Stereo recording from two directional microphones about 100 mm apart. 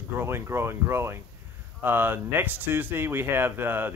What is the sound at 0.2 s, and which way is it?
Speech, 25° right (ahead or behind).